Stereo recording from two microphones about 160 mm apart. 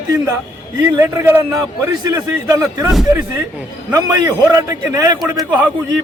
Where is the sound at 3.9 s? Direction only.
20° right (ahead or behind).